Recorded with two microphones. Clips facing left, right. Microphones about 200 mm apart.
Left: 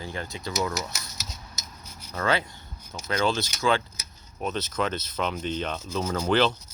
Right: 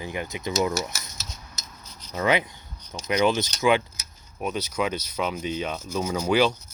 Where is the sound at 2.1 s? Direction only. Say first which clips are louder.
Right 3 dB; 15° right (ahead or behind).